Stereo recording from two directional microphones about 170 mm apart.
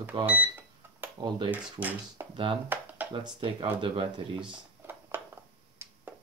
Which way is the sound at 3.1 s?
30° right (ahead or behind).